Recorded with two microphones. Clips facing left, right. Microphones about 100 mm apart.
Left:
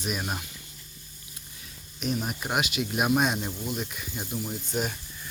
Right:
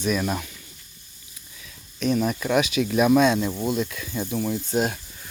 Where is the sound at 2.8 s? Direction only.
75° right (ahead or behind).